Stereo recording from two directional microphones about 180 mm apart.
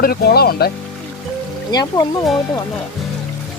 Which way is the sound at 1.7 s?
20° left (ahead or behind).